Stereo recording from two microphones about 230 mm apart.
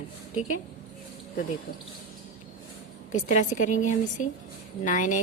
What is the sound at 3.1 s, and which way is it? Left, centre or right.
A woman's voice, left.